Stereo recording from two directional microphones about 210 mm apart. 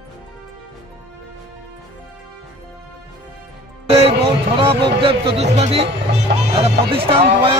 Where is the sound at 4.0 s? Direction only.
25° right (ahead or behind).